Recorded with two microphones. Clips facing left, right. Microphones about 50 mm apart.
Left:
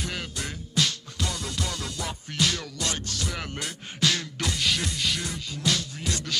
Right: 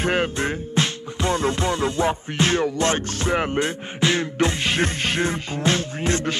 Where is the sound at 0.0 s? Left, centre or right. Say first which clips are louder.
Right 12 dB; right.